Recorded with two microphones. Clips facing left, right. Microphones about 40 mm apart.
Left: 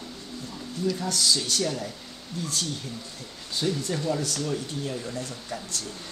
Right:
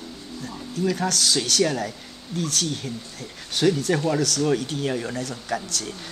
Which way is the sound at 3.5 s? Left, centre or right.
Right.